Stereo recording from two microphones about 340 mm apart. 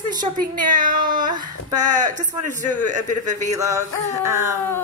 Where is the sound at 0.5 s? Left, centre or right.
Right.